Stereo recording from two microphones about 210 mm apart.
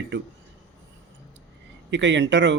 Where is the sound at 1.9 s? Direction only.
60° right (ahead or behind).